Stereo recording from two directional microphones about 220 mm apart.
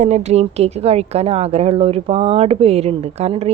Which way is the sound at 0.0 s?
30° right (ahead or behind).